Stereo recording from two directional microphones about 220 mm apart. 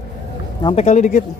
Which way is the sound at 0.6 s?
30° left (ahead or behind).